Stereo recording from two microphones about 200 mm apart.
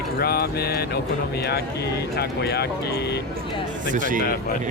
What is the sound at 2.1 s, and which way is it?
Speech, 55° left (ahead or behind).